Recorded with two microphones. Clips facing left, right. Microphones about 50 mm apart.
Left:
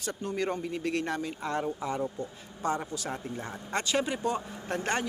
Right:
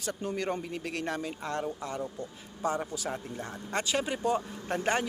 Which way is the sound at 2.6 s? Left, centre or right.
Centre.